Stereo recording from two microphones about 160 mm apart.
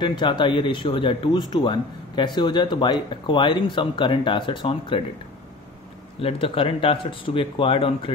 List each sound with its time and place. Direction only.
0.0 s speech: 30° left (ahead or behind)
6.2 s speech: 35° left (ahead or behind)